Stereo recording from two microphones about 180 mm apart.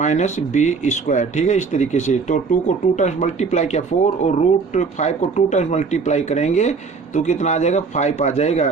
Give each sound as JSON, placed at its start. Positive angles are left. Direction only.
{"t": 0.0, "sound": "speech", "side_deg": 40}